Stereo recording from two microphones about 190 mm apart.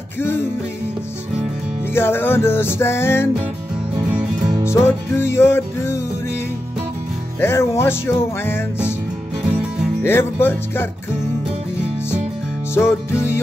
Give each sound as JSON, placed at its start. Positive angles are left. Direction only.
{"t": 0.2, "sound": "music", "side_deg": 10}
{"t": 2.0, "sound": "music", "side_deg": 10}
{"t": 4.4, "sound": "music", "side_deg": -20}
{"t": 4.6, "sound": "music", "side_deg": 15}
{"t": 7.3, "sound": "music", "side_deg": 15}
{"t": 9.5, "sound": "music", "side_deg": -5}
{"t": 10.0, "sound": "music", "side_deg": 10}
{"t": 12.7, "sound": "music", "side_deg": 15}